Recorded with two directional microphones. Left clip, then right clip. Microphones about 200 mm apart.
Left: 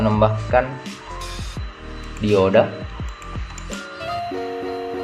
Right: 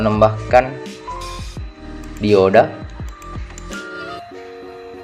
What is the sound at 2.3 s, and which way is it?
Speech, 25° right (ahead or behind).